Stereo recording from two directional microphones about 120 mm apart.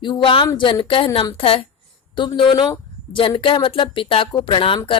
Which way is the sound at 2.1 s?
40° left (ahead or behind).